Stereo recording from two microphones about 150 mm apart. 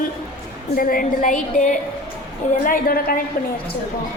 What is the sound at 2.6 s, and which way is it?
Speech, 70° left (ahead or behind).